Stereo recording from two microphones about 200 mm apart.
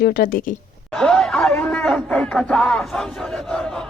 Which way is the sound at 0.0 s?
50° left (ahead or behind).